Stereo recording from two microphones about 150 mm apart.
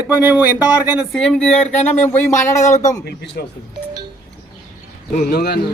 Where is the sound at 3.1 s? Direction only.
90° left.